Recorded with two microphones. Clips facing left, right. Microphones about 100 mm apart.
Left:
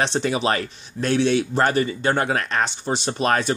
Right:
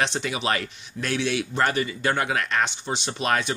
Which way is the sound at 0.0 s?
35° left (ahead or behind).